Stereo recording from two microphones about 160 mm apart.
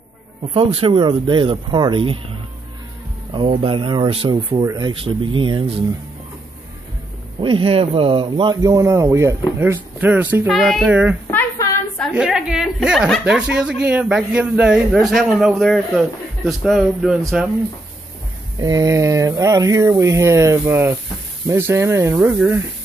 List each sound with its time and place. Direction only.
0.4 s speech: 35° right (ahead or behind)
3.3 s speech: 35° right (ahead or behind)
7.3 s a woman's voice: 35° right (ahead or behind); by 11.1 s 10° right (ahead or behind)
11.2 s a sound: 20° left (ahead or behind)
12.1 s a woman's voice: 5° right (ahead or behind)
18.6 s speech: 20° right (ahead or behind)